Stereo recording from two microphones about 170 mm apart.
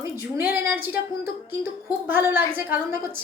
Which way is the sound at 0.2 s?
10° right (ahead or behind).